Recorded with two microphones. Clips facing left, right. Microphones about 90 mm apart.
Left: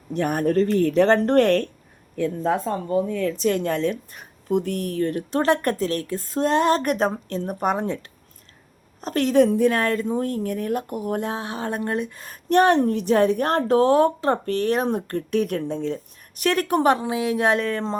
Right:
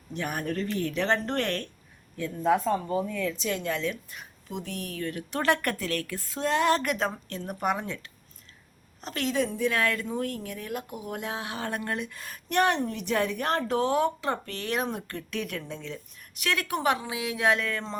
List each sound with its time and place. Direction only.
0.1 s a woman's voice: 45° left (ahead or behind)